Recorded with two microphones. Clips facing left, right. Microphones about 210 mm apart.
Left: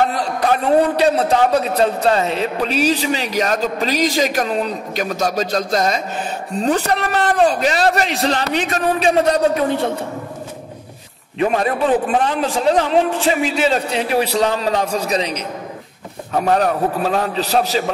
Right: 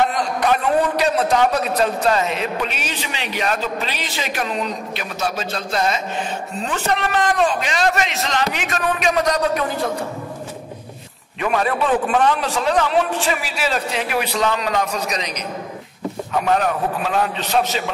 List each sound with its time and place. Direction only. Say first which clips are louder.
0.1 s a man's voice: left 1 dB; 35° left (ahead or behind)
11.3 s a man's voice: left 3 dB; 30° left (ahead or behind)